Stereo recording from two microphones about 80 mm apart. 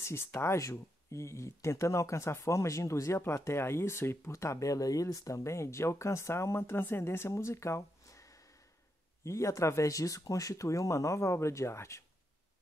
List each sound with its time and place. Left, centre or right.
0.0 s speech: left